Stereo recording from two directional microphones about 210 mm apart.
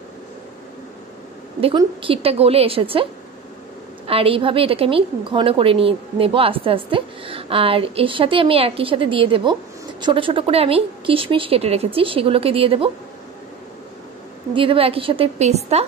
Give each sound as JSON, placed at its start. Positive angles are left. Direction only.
{"t": 1.6, "sound": "a woman's voice", "side_deg": -25}
{"t": 4.1, "sound": "a woman's voice", "side_deg": -25}
{"t": 14.5, "sound": "a woman's voice", "side_deg": -25}